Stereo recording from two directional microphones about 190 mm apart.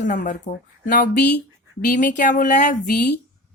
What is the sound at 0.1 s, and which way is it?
Speech, 40° left (ahead or behind).